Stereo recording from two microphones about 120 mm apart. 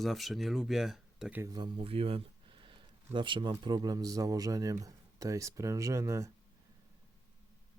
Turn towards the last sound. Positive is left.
turn(degrees=-25)  # may be behind; listen again after turning